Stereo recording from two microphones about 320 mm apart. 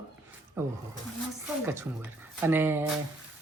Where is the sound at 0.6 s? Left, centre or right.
Centre.